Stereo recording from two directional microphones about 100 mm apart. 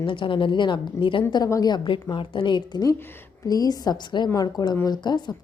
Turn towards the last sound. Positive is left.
turn(degrees=45)  # may be behind; listen again after turning